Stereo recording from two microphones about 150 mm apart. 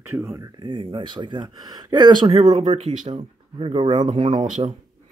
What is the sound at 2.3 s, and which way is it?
Speech, 50° right (ahead or behind).